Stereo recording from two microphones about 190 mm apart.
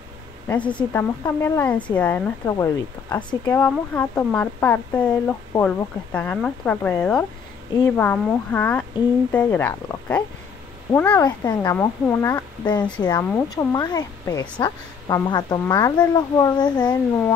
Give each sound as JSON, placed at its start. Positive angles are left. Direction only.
{"t": 0.5, "sound": "speech", "side_deg": 5}
{"t": 3.6, "sound": "speech", "side_deg": 10}